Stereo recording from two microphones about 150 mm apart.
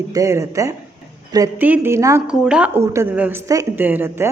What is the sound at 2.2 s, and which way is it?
A woman's voice, 5° right (ahead or behind).